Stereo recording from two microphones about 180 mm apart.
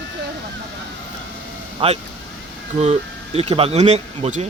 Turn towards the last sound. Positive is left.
turn(degrees=-40)  # may be behind; listen again after turning